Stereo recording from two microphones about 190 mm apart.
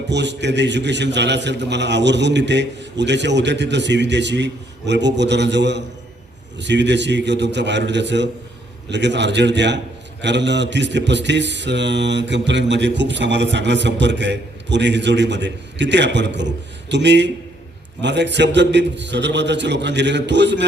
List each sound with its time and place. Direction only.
0.1 s a man's voice: 65° right (ahead or behind)